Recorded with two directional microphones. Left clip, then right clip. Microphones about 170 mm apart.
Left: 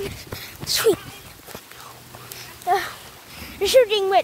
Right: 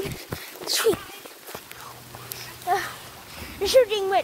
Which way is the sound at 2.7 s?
20° left (ahead or behind).